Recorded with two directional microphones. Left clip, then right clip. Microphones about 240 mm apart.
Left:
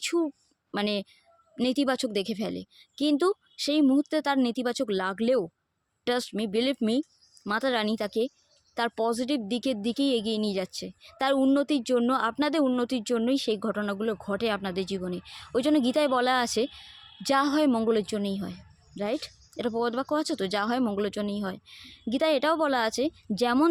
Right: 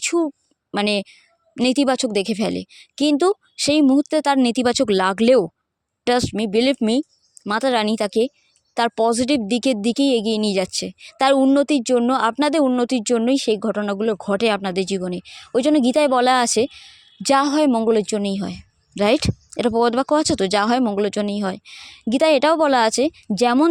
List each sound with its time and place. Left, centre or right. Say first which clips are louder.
0.0 s a woman's voice: right 7 dB; right